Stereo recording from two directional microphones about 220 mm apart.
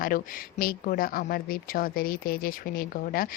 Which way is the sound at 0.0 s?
40° left (ahead or behind).